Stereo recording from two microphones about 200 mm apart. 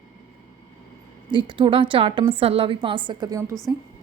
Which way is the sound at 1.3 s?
25° right (ahead or behind).